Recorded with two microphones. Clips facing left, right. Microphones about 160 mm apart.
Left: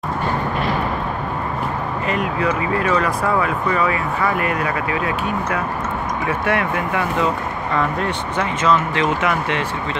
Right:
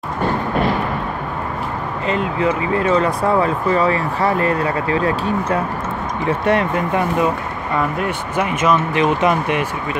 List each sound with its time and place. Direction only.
2.0 s speech: 25° right (ahead or behind)
8.4 s speech: 15° right (ahead or behind)